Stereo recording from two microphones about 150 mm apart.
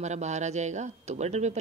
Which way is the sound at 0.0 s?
50° right (ahead or behind).